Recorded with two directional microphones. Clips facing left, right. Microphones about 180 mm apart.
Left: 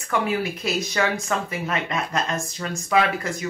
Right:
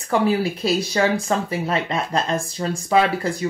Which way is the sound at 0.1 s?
30° right (ahead or behind).